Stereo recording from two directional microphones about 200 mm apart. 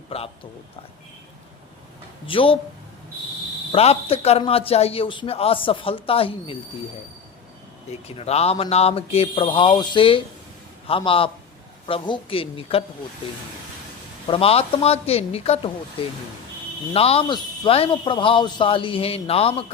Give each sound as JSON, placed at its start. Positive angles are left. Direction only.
{"t": 0.1, "sound": "a man's voice", "side_deg": 30}
{"t": 2.2, "sound": "a man's voice", "side_deg": 25}
{"t": 3.7, "sound": "a man's voice", "side_deg": 30}
{"t": 8.0, "sound": "a man's voice", "side_deg": 30}
{"t": 14.3, "sound": "a man's voice", "side_deg": 30}
{"t": 16.9, "sound": "a man's voice", "side_deg": 30}